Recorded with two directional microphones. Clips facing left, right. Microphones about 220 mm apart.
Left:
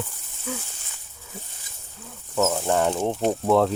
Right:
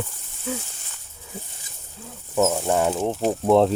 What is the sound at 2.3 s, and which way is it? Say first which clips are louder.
Speech: right 2 dB; 15° right (ahead or behind).